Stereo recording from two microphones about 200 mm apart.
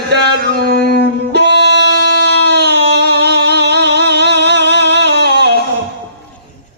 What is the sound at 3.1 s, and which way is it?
Music, 55° right (ahead or behind).